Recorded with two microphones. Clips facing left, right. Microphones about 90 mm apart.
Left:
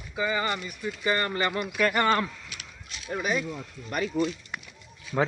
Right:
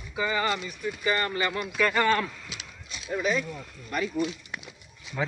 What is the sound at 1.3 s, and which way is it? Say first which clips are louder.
Speech: left 1 dB; 35° left (ahead or behind).